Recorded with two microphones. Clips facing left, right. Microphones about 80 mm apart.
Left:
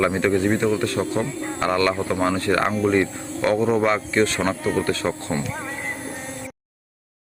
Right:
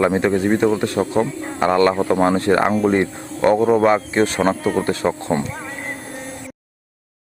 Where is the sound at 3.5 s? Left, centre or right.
Centre.